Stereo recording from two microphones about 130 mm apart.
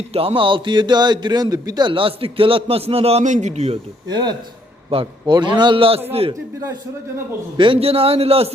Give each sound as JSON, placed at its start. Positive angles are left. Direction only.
{"t": 0.1, "sound": "a man's voice", "side_deg": -50}
{"t": 4.1, "sound": "a man's voice", "side_deg": -35}
{"t": 4.9, "sound": "a man's voice", "side_deg": -45}
{"t": 7.5, "sound": "a man's voice", "side_deg": -40}